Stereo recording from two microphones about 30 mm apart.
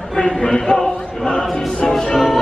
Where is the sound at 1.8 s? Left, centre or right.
Centre.